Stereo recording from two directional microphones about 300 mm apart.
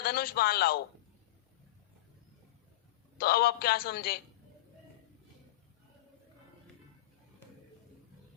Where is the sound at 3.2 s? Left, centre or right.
Left.